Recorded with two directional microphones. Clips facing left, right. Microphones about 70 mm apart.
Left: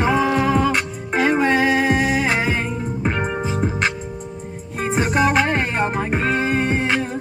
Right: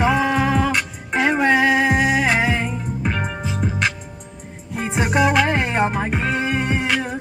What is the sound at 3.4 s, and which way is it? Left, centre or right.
Music, left.